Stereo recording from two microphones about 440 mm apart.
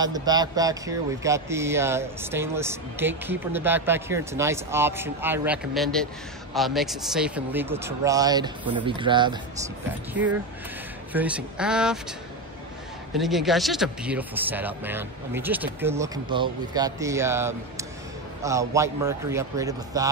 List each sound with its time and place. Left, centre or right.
0.0 s a man's voice: centre
11.1 s a man's voice: centre
13.1 s a man's voice: centre